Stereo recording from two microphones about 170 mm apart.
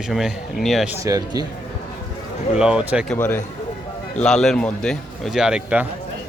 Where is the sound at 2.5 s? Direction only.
5° right (ahead or behind).